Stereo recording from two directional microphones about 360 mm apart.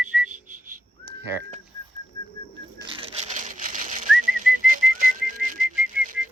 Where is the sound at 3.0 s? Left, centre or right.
Centre.